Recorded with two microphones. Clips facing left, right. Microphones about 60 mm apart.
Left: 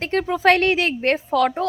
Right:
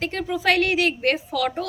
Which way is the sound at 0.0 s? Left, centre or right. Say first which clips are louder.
Left 5 dB; left.